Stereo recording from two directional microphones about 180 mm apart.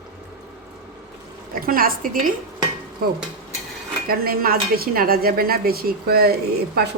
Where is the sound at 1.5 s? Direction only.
55° right (ahead or behind).